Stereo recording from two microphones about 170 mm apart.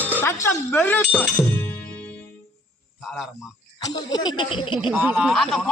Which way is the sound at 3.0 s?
Centre (ahead or behind).